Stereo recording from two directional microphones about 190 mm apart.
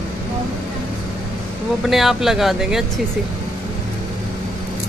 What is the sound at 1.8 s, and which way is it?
Speech, centre (ahead or behind).